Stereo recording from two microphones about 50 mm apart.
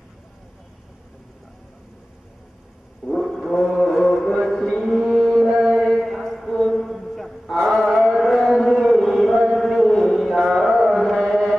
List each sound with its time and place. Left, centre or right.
3.2 s music: centre
4.9 s mantra: centre
5.8 s a sound: centre
9.5 s mantra: centre
10.6 s carnatic music: centre